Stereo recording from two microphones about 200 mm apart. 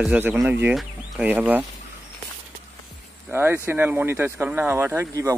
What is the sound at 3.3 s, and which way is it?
Speech, 10° right (ahead or behind).